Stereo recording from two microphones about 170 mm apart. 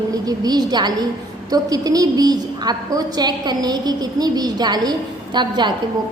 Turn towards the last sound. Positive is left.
turn(degrees=-25)  # may be behind; listen again after turning